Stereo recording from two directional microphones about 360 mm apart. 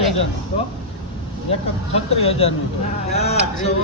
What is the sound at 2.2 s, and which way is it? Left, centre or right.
Speech, centre.